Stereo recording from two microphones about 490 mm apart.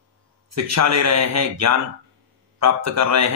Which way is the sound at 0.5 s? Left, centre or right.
Right.